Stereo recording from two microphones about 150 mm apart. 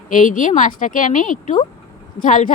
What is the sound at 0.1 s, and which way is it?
Speech, 60° left (ahead or behind).